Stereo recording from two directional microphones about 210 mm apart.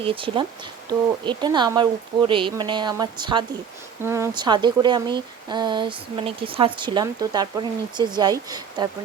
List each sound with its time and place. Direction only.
0.0 s speech: 25° right (ahead or behind)